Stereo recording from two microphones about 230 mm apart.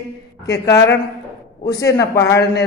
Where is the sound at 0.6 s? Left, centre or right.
Centre.